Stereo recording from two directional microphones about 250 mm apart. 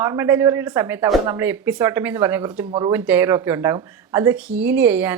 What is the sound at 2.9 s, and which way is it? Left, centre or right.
A woman's voice, centre.